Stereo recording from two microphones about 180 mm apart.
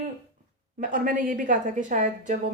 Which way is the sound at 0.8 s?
50° right (ahead or behind).